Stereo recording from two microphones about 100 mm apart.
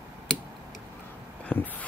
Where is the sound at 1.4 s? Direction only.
15° left (ahead or behind).